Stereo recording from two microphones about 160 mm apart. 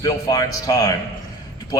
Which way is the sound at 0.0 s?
20° left (ahead or behind).